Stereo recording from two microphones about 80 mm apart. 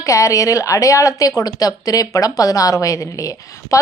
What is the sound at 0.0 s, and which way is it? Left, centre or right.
A woman's voice, left.